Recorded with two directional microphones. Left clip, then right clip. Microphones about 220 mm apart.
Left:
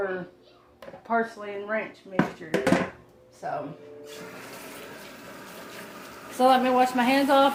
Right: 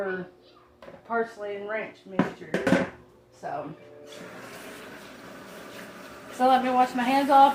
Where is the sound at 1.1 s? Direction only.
55° left (ahead or behind).